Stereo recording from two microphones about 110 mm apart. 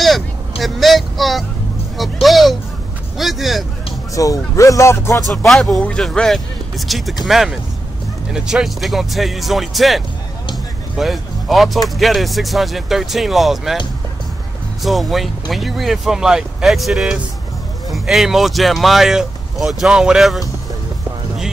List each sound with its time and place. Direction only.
0.0 s vehicle: centre (ahead or behind)
2.0 s speech: centre (ahead or behind)
4.1 s a man's voice: 30° left (ahead or behind)
5.5 s speech: 5° left (ahead or behind)
10.5 s a sound: centre (ahead or behind)
12.0 s speech: centre (ahead or behind)
14.8 s speech: centre (ahead or behind)